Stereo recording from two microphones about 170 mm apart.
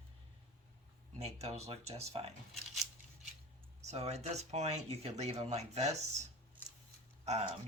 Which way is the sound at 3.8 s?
40° right (ahead or behind).